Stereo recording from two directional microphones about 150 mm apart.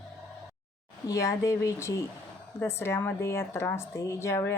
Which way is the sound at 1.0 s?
20° left (ahead or behind).